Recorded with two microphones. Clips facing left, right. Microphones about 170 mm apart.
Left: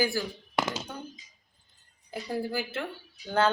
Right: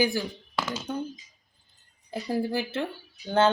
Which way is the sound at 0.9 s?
30° right (ahead or behind).